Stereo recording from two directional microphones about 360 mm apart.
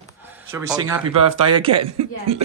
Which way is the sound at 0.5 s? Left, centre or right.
Centre.